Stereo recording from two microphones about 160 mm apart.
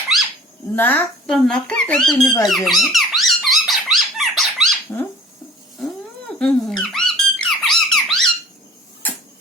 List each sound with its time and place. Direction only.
0.8 s speech: 10° left (ahead or behind)
2.5 s squeak: centre (ahead or behind)
4.9 s a sound: 20° left (ahead or behind)
5.8 s squeak: 5° left (ahead or behind)